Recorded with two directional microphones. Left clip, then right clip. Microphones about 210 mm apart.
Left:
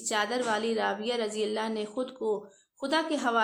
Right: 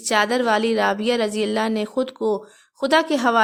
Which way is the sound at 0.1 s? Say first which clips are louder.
Right 10 dB; 50° right (ahead or behind).